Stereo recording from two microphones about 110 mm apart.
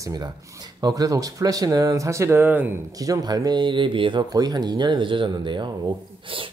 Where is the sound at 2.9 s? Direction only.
35° right (ahead or behind); by 4.2 s 50° right (ahead or behind).